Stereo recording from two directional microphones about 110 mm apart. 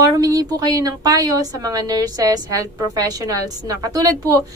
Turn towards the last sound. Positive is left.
turn(degrees=-30)  # may be behind; listen again after turning